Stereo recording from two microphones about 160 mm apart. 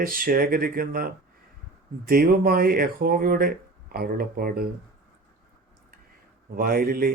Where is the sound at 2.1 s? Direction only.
70° right (ahead or behind).